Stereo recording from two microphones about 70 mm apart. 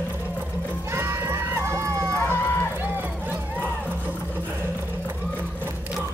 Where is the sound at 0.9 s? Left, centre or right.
Right.